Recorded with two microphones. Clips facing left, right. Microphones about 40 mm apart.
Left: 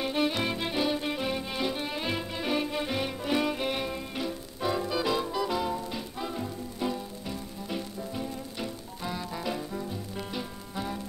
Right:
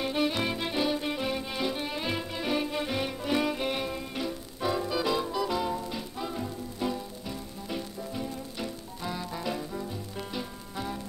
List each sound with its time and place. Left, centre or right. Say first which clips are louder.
0.0 s music: even; centre